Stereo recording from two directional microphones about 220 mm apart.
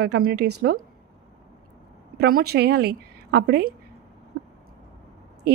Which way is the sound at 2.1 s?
45° right (ahead or behind).